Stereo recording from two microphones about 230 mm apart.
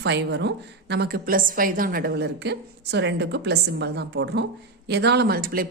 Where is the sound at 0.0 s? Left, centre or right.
Right.